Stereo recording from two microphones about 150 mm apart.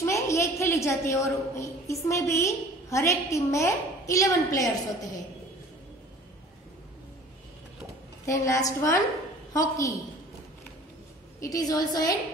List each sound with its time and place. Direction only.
0.0 s a woman's voice: 20° left (ahead or behind)
8.3 s a woman's voice: 20° left (ahead or behind)
11.4 s a woman's voice: 25° left (ahead or behind)